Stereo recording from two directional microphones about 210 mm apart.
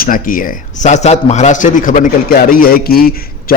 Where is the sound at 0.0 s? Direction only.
40° left (ahead or behind).